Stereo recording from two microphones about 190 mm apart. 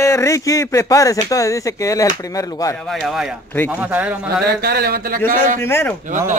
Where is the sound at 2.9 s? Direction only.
Centre (ahead or behind).